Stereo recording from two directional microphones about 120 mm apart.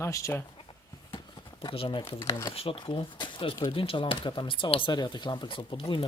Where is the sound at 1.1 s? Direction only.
40° left (ahead or behind).